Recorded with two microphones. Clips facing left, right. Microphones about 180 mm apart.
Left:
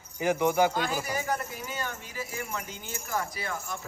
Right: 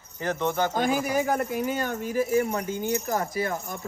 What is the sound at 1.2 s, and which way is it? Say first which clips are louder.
A man's voice: right 7 dB; 50° right (ahead or behind).